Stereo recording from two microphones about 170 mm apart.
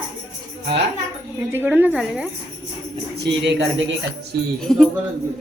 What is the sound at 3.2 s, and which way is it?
Speech, 90° right.